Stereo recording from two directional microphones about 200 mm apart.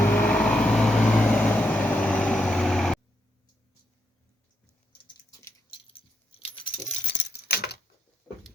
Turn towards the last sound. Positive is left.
turn(degrees=50)  # may be behind; listen again after turning